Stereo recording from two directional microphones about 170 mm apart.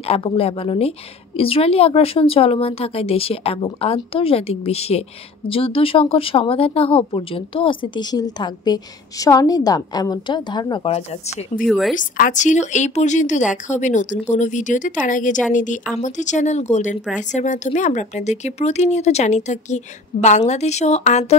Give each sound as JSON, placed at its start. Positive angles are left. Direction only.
{"t": 0.0, "sound": "speech", "side_deg": 35}
{"t": 11.6, "sound": "a woman's voice", "side_deg": 0}
{"t": 11.9, "sound": "speech", "side_deg": 50}